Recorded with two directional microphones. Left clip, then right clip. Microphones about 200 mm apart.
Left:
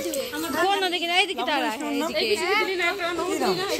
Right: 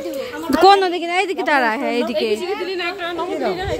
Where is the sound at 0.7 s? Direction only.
45° right (ahead or behind).